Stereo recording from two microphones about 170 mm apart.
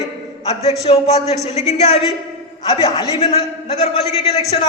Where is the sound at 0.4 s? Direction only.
35° left (ahead or behind).